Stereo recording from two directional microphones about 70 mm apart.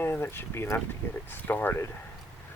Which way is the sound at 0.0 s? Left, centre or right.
Left.